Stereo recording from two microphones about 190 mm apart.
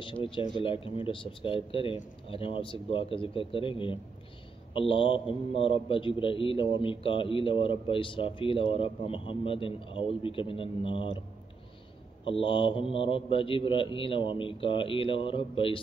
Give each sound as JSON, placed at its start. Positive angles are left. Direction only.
{"t": 0.0, "sound": "a man's voice", "side_deg": 25}
{"t": 12.3, "sound": "a man's voice", "side_deg": 25}